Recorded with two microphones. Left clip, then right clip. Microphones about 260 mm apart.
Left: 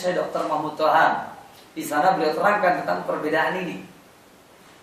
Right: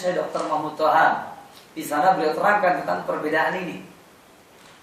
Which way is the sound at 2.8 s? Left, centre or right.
Centre.